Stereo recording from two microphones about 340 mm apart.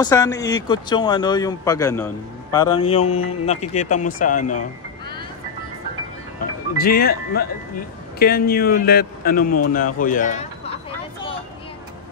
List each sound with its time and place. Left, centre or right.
0.0 s a man's voice: centre
6.8 s speech: left